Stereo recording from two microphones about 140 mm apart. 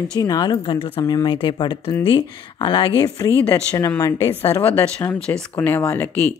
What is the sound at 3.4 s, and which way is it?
Speech, 20° left (ahead or behind).